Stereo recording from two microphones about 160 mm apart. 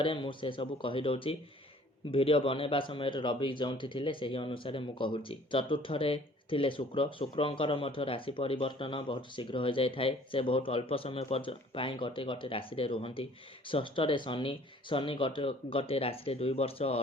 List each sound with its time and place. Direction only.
0.0 s speech: 30° left (ahead or behind)